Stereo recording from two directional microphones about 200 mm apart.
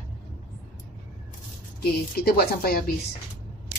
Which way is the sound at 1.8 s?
50° left (ahead or behind).